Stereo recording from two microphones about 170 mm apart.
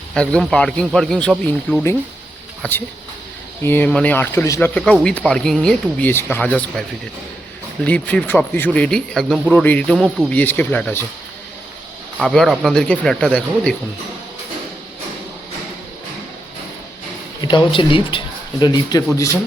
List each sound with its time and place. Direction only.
0.1 s a man's voice: 5° left (ahead or behind)
7.9 s a man's voice: 5° left (ahead or behind)
10.3 s a man's voice: 10° left (ahead or behind)
12.2 s a man's voice: centre (ahead or behind)
17.4 s speech: 25° left (ahead or behind)